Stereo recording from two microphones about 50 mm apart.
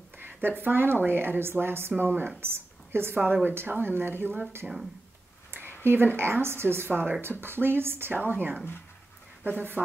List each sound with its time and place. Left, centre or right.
0.2 s speech: right
2.4 s a woman's voice: right
4.6 s speech: centre
6.1 s speech: right
8.3 s speech: right